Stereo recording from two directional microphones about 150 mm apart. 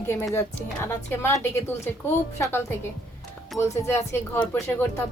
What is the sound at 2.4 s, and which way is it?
Speech, 15° left (ahead or behind).